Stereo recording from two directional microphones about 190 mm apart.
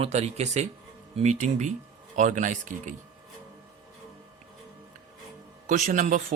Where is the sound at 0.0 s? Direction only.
35° right (ahead or behind).